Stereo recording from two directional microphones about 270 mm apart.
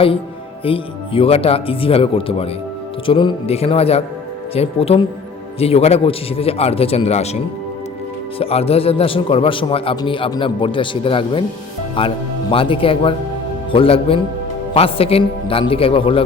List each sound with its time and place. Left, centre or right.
0.6 s a man's voice: centre
8.4 s a man's voice: left